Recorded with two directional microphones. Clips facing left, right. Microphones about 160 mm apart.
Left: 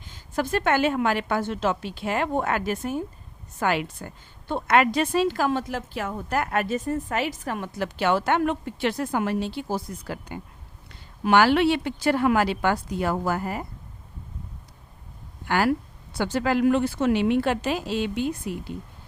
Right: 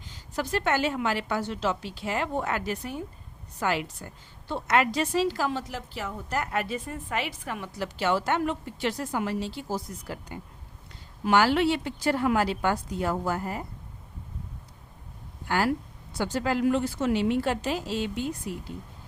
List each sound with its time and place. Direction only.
0.0 s a woman's voice: 50° left (ahead or behind)
3.6 s a woman's voice: 60° left (ahead or behind); by 13.7 s 75° left (ahead or behind)
15.4 s speech: 75° left (ahead or behind)